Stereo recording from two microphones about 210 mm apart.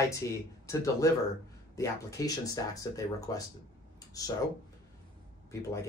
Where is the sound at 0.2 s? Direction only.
15° left (ahead or behind).